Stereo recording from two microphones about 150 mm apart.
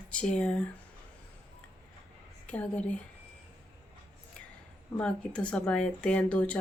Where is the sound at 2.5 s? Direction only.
10° left (ahead or behind).